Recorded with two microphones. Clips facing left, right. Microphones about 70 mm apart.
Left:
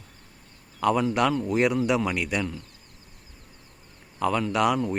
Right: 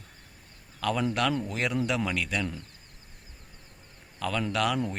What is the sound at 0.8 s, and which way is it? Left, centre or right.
A man's voice, centre.